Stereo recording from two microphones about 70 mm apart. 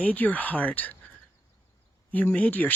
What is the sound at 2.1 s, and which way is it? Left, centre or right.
Speech, left.